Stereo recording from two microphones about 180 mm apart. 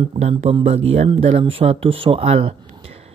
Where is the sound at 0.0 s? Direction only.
35° right (ahead or behind).